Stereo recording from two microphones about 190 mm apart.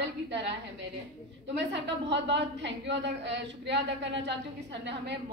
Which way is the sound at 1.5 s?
65° right (ahead or behind).